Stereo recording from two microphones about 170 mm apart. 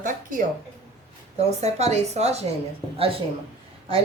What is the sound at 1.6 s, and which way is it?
A woman's voice, 40° right (ahead or behind).